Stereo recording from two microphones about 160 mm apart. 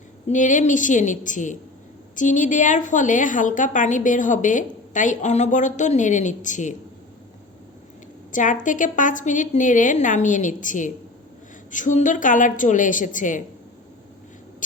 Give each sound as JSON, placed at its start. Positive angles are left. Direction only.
{"t": 0.3, "sound": "a woman's voice", "side_deg": 50}
{"t": 8.3, "sound": "a woman's voice", "side_deg": 55}